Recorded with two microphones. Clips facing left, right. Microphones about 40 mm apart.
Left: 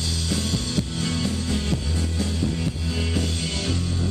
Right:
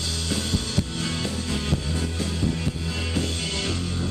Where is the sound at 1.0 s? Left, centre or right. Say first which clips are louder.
Left 2 dB; centre.